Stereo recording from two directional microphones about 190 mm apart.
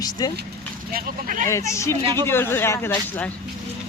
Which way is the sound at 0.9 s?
45° right (ahead or behind).